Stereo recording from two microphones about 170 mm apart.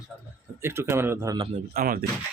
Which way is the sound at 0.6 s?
15° right (ahead or behind).